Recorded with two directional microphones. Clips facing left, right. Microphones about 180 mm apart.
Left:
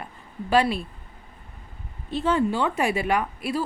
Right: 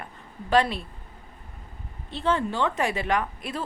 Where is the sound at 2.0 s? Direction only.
10° left (ahead or behind).